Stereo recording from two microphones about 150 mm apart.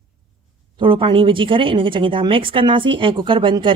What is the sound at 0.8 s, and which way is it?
Speech, 35° right (ahead or behind).